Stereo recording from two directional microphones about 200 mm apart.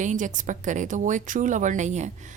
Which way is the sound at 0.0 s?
40° right (ahead or behind).